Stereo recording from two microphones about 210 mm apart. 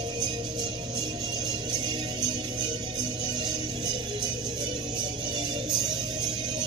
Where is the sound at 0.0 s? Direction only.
20° right (ahead or behind).